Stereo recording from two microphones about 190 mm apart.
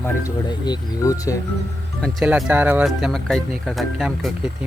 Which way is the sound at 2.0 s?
Centre (ahead or behind).